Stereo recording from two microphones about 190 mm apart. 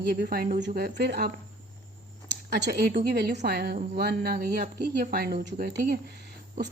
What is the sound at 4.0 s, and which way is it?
A woman's voice, 55° right (ahead or behind).